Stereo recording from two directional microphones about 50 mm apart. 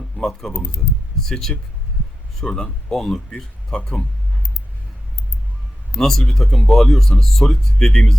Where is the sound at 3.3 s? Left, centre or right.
Centre.